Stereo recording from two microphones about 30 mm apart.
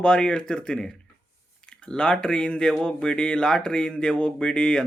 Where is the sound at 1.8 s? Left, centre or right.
Left.